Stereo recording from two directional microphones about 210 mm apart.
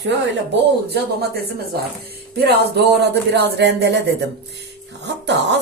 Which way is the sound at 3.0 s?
50° right (ahead or behind).